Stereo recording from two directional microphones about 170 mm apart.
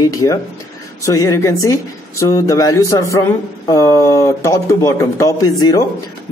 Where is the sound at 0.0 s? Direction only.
20° left (ahead or behind).